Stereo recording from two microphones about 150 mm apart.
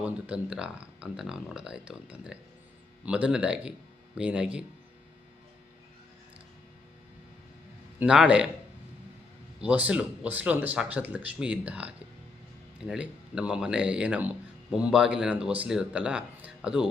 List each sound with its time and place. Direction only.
0.0 s speech: 5° right (ahead or behind)
7.9 s speech: 5° right (ahead or behind)
9.6 s speech: 10° right (ahead or behind)